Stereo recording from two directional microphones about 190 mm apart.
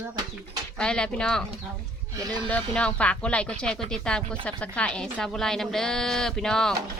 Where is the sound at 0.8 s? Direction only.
5° left (ahead or behind).